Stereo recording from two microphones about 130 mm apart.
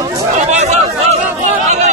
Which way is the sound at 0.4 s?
60° right (ahead or behind).